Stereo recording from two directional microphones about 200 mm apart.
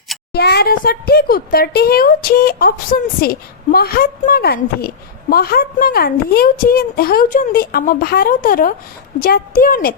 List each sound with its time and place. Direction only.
0.3 s speech: 55° left (ahead or behind)